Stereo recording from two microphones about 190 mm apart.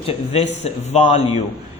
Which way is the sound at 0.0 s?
35° left (ahead or behind).